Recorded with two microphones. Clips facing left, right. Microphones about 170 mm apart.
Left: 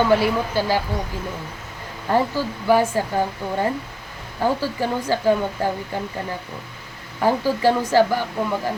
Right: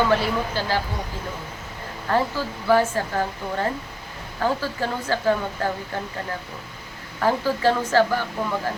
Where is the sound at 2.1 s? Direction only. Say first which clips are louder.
Left 3 dB; 15° left (ahead or behind).